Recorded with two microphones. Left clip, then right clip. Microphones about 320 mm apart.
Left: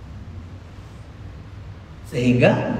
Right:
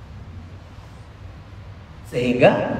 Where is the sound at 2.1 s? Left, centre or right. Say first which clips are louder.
Right 2 dB; centre.